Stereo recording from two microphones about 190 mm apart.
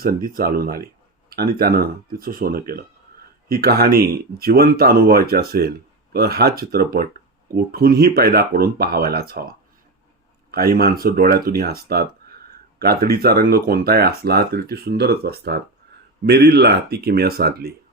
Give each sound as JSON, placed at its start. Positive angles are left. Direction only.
{"t": 0.3, "sound": "speech", "side_deg": -50}